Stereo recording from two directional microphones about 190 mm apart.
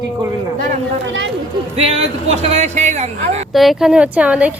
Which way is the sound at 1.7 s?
35° right (ahead or behind).